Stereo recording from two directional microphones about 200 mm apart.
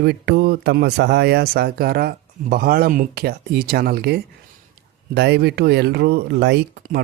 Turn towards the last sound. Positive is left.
turn(degrees=-55)  # may be behind; listen again after turning